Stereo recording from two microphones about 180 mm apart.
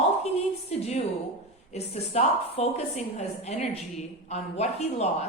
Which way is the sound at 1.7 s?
35° left (ahead or behind).